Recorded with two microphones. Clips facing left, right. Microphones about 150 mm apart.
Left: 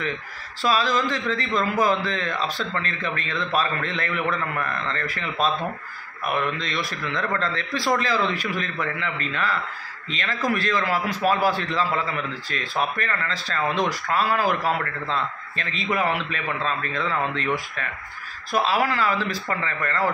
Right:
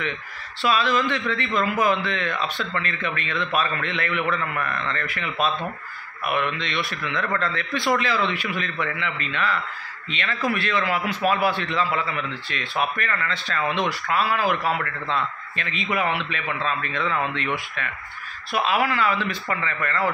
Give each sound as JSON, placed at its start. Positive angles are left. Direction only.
{"t": 0.6, "sound": "a man's voice", "side_deg": 40}